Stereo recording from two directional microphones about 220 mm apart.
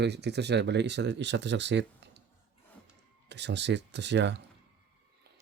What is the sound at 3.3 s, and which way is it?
Speech, 50° right (ahead or behind).